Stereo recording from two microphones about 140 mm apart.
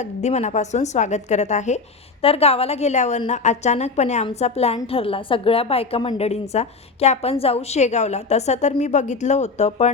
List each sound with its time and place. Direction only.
0.0 s a woman's voice: 55° left (ahead or behind)
2.2 s a woman's voice: 45° left (ahead or behind)